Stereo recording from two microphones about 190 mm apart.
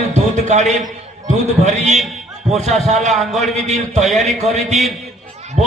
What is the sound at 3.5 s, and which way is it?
A man's voice, 35° right (ahead or behind).